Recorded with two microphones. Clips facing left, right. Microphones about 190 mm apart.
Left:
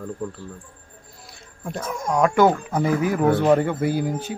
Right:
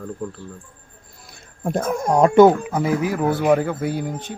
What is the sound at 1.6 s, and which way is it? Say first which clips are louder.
Speech: right 7 dB; 50° right (ahead or behind).